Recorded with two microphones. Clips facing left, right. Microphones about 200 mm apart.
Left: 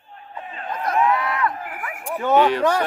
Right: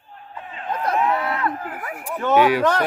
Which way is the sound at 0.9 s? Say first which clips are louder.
Left 1 dB; 30° right (ahead or behind).